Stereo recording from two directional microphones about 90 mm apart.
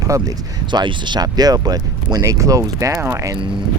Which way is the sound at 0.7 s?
55° right (ahead or behind).